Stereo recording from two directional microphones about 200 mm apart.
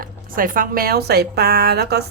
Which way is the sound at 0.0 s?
45° right (ahead or behind).